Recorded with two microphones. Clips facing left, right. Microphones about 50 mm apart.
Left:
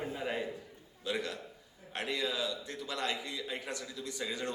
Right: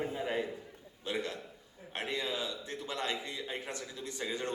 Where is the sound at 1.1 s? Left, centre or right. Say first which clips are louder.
Even; right.